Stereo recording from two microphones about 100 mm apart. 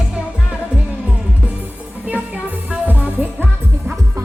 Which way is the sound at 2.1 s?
15° right (ahead or behind).